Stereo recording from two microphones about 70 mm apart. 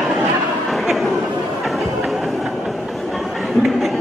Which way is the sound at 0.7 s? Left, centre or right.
Centre.